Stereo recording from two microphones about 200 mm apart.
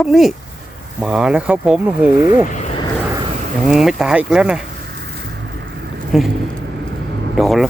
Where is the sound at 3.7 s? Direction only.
5° right (ahead or behind).